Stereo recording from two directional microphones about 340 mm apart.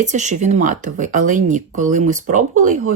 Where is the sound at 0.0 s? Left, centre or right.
Right.